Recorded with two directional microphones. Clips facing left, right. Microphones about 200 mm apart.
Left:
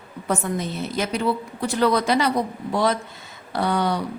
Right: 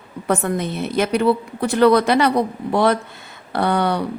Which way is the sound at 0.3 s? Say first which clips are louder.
Right 4 dB; 60° right (ahead or behind).